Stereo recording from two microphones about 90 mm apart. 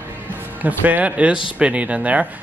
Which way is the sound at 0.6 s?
20° right (ahead or behind).